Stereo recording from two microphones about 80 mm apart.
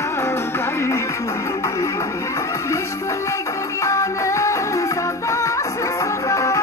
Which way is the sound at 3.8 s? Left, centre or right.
Left.